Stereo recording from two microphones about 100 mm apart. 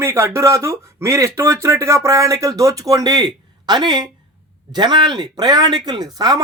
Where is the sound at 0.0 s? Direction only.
25° right (ahead or behind).